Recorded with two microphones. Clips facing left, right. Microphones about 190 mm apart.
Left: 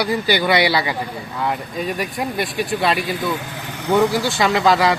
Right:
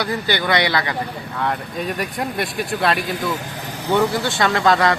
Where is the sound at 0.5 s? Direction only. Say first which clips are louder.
Left 2 dB; 10° left (ahead or behind).